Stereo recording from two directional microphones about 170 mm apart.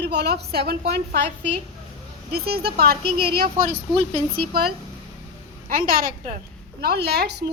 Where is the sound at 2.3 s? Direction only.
70° right (ahead or behind).